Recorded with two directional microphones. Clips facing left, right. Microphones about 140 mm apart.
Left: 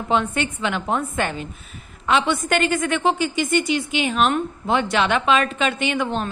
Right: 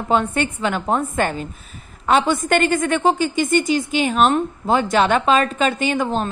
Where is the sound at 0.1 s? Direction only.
50° right (ahead or behind).